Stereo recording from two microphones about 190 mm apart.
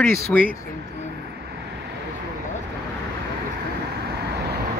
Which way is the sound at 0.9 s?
60° right (ahead or behind).